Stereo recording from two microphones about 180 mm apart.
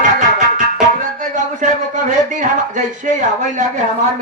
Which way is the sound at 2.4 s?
45° right (ahead or behind).